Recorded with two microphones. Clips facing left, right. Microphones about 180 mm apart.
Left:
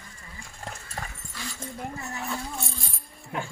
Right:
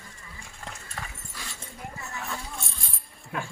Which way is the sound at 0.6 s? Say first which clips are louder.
Left 3 dB; 40° left (ahead or behind).